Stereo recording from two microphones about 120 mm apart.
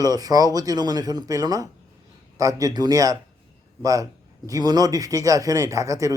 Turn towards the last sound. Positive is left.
turn(degrees=-25)  # may be behind; listen again after turning